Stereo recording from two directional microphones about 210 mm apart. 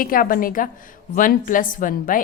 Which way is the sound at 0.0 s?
40° left (ahead or behind).